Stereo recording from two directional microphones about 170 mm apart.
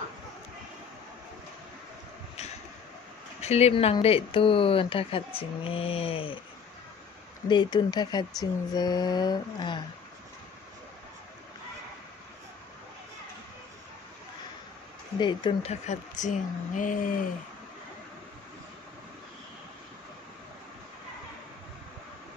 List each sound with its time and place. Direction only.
3.3 s speech: 40° left (ahead or behind)
7.4 s speech: 25° left (ahead or behind)
15.1 s speech: 25° left (ahead or behind)
15.7 s speech: 45° left (ahead or behind)